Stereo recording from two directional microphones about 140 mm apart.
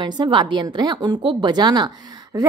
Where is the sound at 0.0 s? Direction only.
35° right (ahead or behind).